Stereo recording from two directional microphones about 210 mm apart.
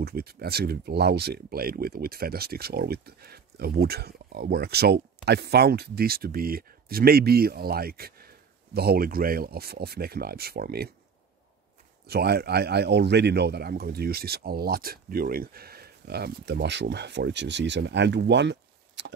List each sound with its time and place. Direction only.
0.0 s speech: 50° right (ahead or behind)
12.1 s speech: 50° right (ahead or behind)